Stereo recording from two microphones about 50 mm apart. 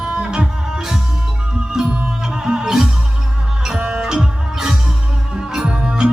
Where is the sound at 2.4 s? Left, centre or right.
Centre.